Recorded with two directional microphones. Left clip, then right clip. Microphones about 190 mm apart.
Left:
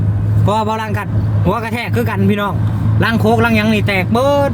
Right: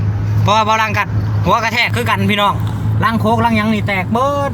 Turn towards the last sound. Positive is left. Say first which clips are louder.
# left 2 dB
turn(degrees=15)  # may be behind; listen again after turning